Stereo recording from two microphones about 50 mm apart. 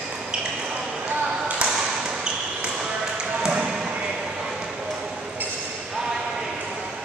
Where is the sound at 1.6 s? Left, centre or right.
Right.